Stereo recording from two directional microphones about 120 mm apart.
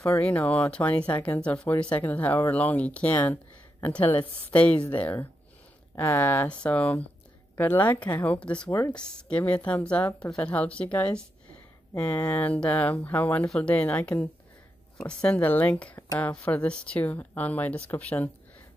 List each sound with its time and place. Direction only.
0.2 s speech: 15° left (ahead or behind)